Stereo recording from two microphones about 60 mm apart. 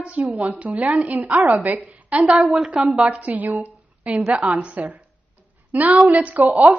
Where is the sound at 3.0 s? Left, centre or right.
Right.